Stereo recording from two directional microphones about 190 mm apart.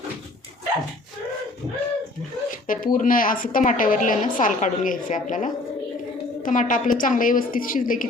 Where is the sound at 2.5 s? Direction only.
45° left (ahead or behind).